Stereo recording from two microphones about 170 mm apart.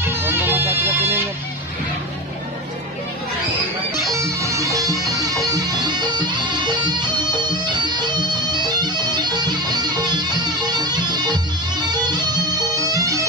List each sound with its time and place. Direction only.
0.0 s music: 15° right (ahead or behind)
4.1 s music: 20° right (ahead or behind)